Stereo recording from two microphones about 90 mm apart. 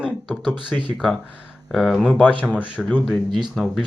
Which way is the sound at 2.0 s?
15° left (ahead or behind).